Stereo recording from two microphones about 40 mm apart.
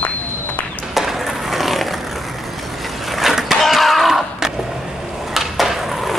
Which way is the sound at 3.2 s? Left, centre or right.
Centre.